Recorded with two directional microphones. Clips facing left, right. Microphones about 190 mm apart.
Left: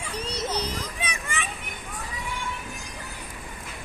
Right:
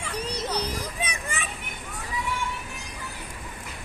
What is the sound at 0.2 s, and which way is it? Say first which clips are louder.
Children playing: even; 10° right (ahead or behind).